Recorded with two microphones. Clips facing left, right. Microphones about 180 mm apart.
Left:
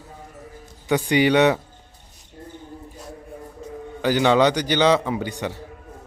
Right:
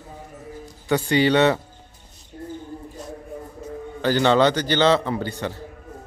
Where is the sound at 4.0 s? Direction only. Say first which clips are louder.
Even; 10° left (ahead or behind).